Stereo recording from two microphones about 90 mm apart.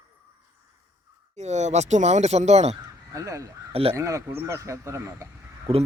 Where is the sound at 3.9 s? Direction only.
40° right (ahead or behind).